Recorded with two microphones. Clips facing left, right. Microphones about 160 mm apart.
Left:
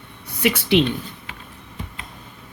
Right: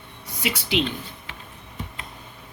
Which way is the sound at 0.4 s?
60° left (ahead or behind).